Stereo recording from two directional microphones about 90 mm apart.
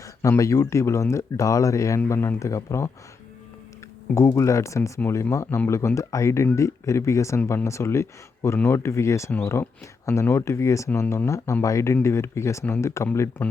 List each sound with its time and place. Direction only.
0.2 s speech: 35° left (ahead or behind)
2.0 s speech: 25° left (ahead or behind)
4.1 s speech: 35° left (ahead or behind)